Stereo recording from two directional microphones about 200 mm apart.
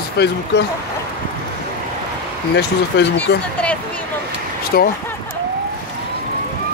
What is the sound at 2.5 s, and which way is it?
Speech, 55° left (ahead or behind).